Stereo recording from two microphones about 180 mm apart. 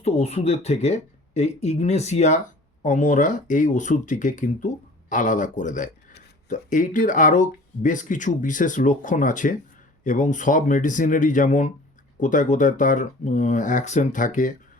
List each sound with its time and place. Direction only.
0.0 s speech: 35° left (ahead or behind)